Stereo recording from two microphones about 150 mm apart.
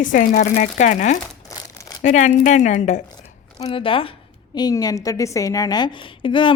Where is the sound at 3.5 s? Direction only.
35° left (ahead or behind).